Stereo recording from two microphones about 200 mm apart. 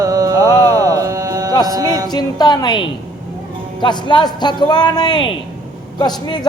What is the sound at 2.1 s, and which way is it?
A man's voice, 20° left (ahead or behind).